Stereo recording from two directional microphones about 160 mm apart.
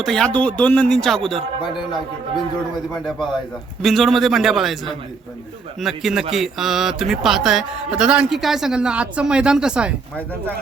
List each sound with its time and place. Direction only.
0.0 s speech: 5° left (ahead or behind)
3.8 s speech: centre (ahead or behind)
5.8 s speech: centre (ahead or behind)